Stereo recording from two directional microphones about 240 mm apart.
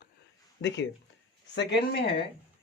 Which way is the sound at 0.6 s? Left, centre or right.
Left.